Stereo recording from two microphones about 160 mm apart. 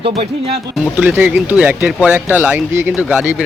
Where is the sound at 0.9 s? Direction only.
10° right (ahead or behind).